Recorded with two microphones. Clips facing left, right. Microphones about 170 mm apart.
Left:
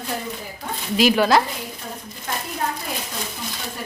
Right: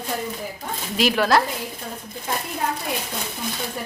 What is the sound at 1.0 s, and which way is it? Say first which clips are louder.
Speech: left 2 dB; centre (ahead or behind).